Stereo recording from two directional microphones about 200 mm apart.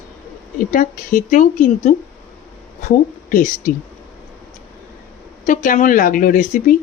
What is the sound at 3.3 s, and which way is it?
Speech, 40° left (ahead or behind).